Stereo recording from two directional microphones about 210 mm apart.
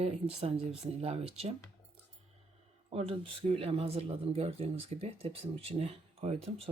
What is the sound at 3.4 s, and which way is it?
Speech, 30° right (ahead or behind).